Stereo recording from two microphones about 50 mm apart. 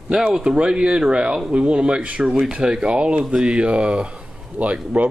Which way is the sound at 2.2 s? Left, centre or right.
Centre.